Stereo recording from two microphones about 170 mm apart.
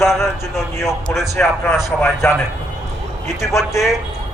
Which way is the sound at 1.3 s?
15° left (ahead or behind).